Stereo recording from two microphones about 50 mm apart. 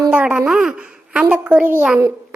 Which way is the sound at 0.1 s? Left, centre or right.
Right.